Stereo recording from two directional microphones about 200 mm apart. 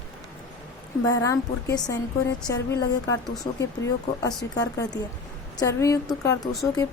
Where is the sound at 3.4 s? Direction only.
15° left (ahead or behind).